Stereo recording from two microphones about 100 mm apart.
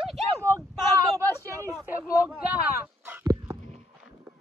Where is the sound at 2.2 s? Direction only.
10° right (ahead or behind).